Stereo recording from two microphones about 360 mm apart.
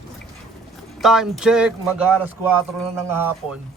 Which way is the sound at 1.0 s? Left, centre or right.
Centre.